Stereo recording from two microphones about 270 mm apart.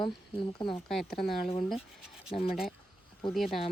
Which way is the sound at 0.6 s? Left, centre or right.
Centre.